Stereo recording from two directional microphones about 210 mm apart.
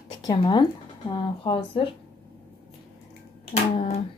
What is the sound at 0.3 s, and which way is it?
Speech, 20° left (ahead or behind).